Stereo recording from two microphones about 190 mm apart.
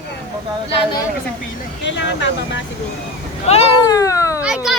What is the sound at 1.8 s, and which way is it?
Speech, 70° left (ahead or behind).